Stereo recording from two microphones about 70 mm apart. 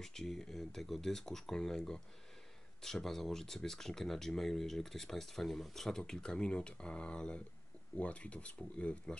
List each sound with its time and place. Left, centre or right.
0.0 s speech: centre